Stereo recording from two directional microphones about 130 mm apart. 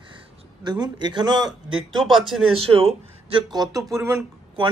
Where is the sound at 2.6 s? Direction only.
50° right (ahead or behind).